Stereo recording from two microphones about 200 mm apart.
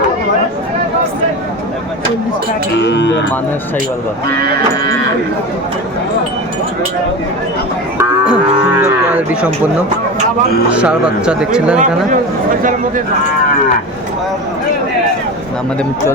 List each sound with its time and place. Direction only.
2.7 s speech: 60° left (ahead or behind)
7.9 s moo: 5° right (ahead or behind)
8.8 s speech: 5° right (ahead or behind)
10.7 s speech: 5° right (ahead or behind)